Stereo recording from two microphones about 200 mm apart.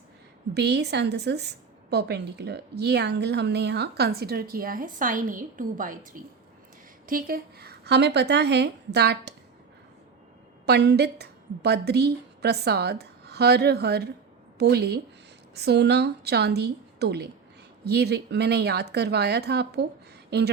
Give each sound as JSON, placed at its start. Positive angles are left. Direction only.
{"t": 0.5, "sound": "a woman's voice", "side_deg": -55}
{"t": 7.1, "sound": "a woman's voice", "side_deg": -45}
{"t": 10.7, "sound": "a woman's voice", "side_deg": -55}